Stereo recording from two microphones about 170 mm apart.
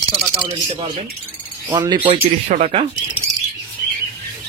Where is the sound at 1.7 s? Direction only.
25° right (ahead or behind).